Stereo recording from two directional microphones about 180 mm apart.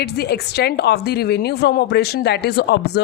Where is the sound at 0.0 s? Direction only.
65° left (ahead or behind).